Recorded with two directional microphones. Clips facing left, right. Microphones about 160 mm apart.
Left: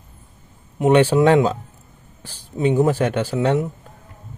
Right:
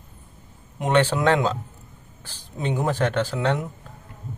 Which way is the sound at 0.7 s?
10° left (ahead or behind).